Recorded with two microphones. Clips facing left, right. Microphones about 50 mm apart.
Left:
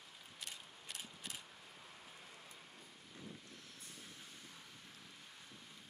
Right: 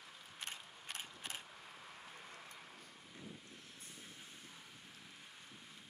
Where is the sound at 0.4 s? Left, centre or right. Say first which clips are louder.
Right 3 dB; right.